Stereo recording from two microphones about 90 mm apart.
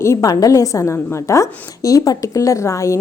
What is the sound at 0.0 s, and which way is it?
A woman's voice, 30° left (ahead or behind).